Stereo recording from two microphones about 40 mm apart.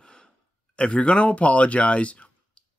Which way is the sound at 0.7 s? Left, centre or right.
Left.